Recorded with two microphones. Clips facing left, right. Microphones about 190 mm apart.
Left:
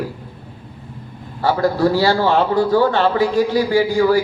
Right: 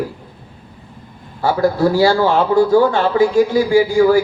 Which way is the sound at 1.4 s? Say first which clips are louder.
Right 1 dB; 50° right (ahead or behind).